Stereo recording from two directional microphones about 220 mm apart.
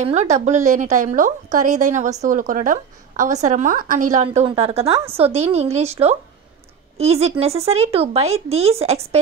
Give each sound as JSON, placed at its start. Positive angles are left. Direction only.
{"t": 0.0, "sound": "a woman's voice", "side_deg": -30}